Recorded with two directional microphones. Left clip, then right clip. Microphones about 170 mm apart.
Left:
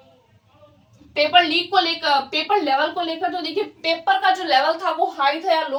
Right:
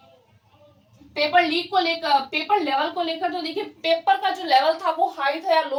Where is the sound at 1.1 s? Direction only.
10° right (ahead or behind).